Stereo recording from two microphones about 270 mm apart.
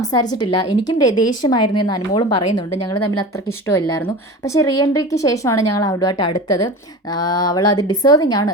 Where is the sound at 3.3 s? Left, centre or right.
Centre.